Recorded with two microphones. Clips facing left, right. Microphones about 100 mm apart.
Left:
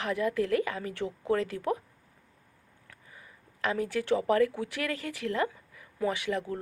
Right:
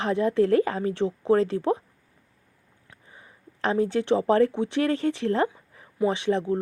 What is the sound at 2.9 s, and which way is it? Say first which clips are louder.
Speech: right 2 dB; 25° right (ahead or behind).